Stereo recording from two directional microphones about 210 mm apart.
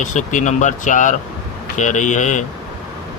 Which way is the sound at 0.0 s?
35° left (ahead or behind).